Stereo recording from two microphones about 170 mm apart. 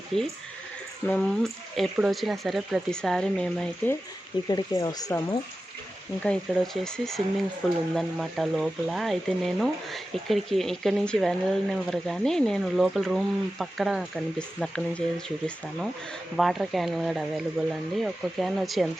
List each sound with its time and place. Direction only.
0.1 s speech: centre (ahead or behind)
4.4 s speech: 25° left (ahead or behind)
6.2 s speech: 5° left (ahead or behind)
16.4 s speech: centre (ahead or behind)